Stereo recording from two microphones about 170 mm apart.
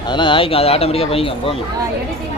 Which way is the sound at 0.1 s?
30° left (ahead or behind).